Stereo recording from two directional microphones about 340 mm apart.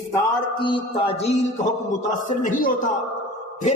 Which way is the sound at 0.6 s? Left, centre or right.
Centre.